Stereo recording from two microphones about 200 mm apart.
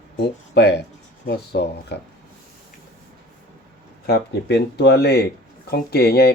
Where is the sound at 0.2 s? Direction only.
55° left (ahead or behind).